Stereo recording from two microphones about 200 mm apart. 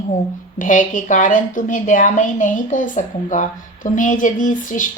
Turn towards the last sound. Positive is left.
turn(degrees=40)  # may be behind; listen again after turning